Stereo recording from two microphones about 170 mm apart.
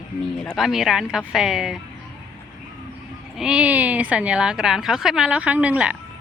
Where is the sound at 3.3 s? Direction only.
5° right (ahead or behind).